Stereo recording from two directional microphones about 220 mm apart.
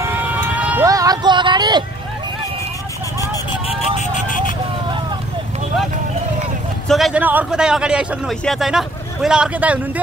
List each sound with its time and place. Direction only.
0.0 s music: 5° right (ahead or behind)
4.0 s vehicle: 35° left (ahead or behind)
6.9 s a man's voice: centre (ahead or behind)